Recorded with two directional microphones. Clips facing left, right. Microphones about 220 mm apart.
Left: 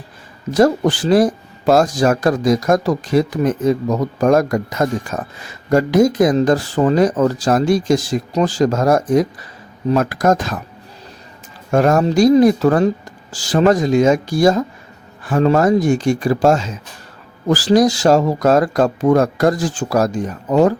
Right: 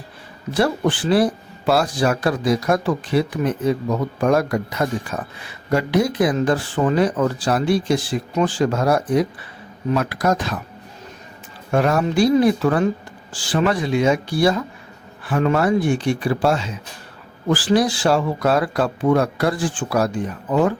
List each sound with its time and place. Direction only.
0.5 s speech: 40° left (ahead or behind)
11.7 s speech: 45° left (ahead or behind)